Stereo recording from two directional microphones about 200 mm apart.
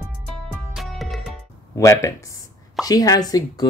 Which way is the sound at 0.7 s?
Centre (ahead or behind).